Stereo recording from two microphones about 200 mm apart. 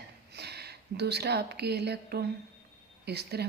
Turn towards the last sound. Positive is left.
turn(degrees=-55)  # may be behind; listen again after turning